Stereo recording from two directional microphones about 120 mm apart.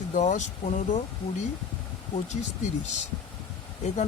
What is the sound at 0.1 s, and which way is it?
Speech, 85° left.